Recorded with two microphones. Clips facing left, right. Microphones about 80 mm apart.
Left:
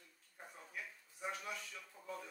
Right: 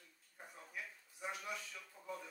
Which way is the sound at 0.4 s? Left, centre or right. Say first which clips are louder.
Even; centre.